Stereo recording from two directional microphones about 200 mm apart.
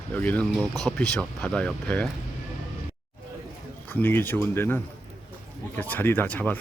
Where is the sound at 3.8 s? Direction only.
10° left (ahead or behind).